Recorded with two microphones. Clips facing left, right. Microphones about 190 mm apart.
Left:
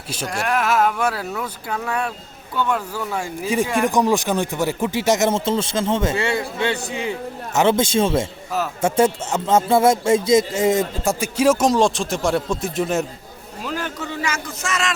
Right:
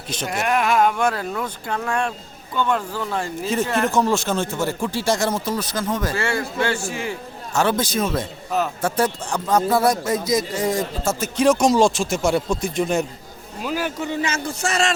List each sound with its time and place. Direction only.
0.3 s a man's voice: 5° right (ahead or behind); by 14.9 s 30° right (ahead or behind)